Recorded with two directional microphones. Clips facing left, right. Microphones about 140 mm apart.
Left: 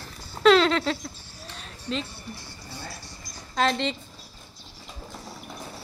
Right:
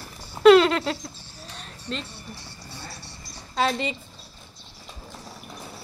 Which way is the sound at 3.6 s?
5° right (ahead or behind).